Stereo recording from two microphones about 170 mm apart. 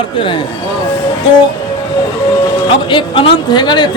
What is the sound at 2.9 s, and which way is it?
Speech, 30° left (ahead or behind).